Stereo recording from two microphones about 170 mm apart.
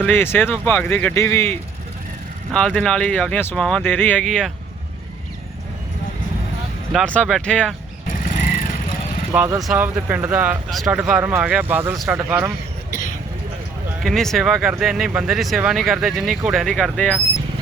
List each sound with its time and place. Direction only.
0.0 s speech: 10° left (ahead or behind)
2.5 s speech: 5° left (ahead or behind)
6.9 s speech: 5° left (ahead or behind)
9.3 s speech: 10° right (ahead or behind)
12.9 s vehicle: 55° left (ahead or behind)
14.0 s speech: centre (ahead or behind)